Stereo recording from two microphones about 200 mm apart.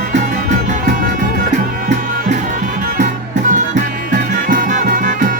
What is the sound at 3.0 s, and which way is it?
Music, 40° right (ahead or behind).